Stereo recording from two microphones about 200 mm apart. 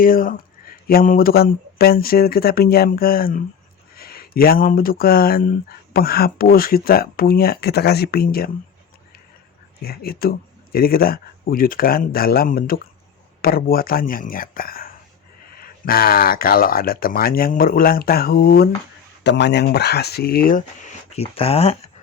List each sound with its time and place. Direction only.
0.0 s speech: 45° left (ahead or behind)
9.8 s speech: 50° left (ahead or behind)
21.2 s speech: 30° left (ahead or behind)